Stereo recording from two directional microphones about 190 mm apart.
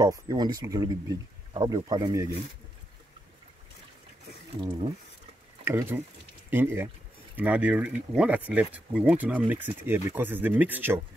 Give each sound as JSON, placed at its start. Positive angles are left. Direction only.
{"t": 0.0, "sound": "speech", "side_deg": -20}
{"t": 5.7, "sound": "speech", "side_deg": -15}